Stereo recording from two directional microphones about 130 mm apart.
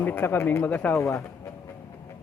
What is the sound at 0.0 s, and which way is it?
Speech, 15° left (ahead or behind).